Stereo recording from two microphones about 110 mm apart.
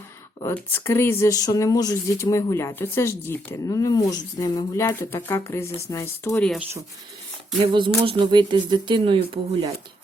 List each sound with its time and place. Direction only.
0.5 s speech: 20° left (ahead or behind)
1.3 s speech: 35° left (ahead or behind)
4.9 s speech: 20° left (ahead or behind)
7.7 s speech: 45° right (ahead or behind)